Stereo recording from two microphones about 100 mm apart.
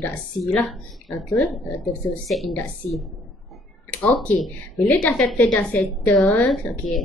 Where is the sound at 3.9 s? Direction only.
15° left (ahead or behind).